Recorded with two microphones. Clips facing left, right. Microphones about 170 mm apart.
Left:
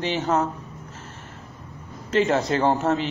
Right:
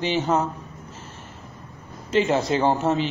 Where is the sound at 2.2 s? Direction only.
20° right (ahead or behind).